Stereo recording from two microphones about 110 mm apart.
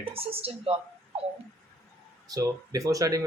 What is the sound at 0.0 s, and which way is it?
A woman's voice, 60° right (ahead or behind).